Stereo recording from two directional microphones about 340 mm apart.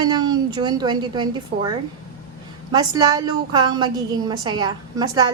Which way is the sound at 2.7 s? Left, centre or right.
Centre.